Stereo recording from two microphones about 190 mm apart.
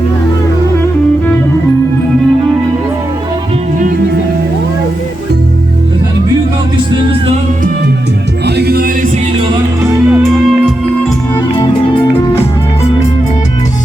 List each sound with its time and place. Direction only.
8.4 s music: 60° right (ahead or behind)
9.8 s music: 5° right (ahead or behind)